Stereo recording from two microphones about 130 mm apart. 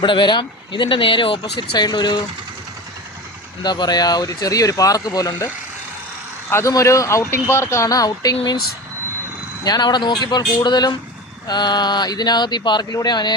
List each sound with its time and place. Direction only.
0.0 s speech: 40° left (ahead or behind)
3.6 s speech: 35° left (ahead or behind)
6.5 s speech: 20° left (ahead or behind)
9.6 s speech: 35° left (ahead or behind)